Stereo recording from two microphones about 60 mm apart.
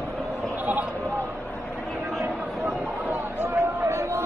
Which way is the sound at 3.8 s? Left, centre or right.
Right.